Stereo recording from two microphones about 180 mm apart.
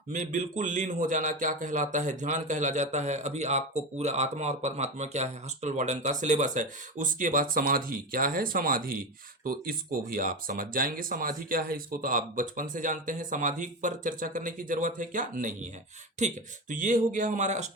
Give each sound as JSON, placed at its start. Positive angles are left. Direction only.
{"t": 0.1, "sound": "a man's voice", "side_deg": -45}